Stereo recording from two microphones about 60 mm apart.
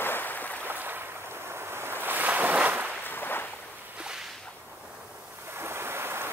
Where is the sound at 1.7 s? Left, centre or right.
Right.